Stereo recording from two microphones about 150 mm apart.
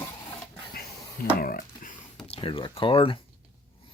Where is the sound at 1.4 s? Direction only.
70° left (ahead or behind).